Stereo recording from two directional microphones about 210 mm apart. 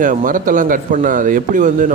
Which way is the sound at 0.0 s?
40° right (ahead or behind).